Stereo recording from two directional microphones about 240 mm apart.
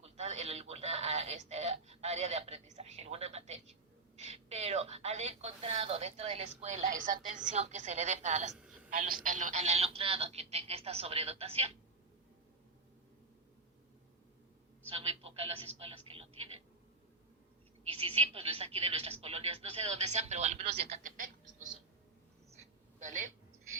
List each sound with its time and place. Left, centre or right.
0.0 s a woman's voice: right
8.5 s a sound: centre
8.9 s a woman's voice: right
14.8 s a woman's voice: right
17.8 s a woman's voice: right
22.5 s a sound: right